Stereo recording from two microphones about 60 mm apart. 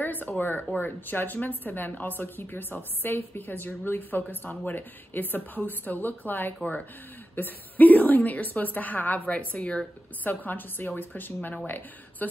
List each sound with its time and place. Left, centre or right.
0.0 s a sound: left
0.4 s a woman's voice: left
10.2 s a woman's voice: left